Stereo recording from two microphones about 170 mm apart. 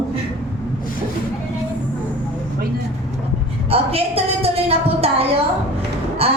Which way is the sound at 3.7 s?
35° right (ahead or behind).